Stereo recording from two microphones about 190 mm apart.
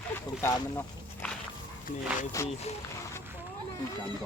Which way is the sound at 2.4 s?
15° left (ahead or behind).